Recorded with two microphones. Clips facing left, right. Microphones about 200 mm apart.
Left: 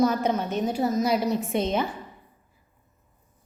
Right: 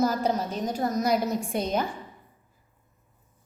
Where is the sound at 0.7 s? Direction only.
5° left (ahead or behind).